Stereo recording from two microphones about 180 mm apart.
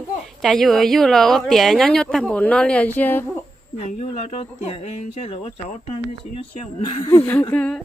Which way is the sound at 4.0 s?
35° left (ahead or behind).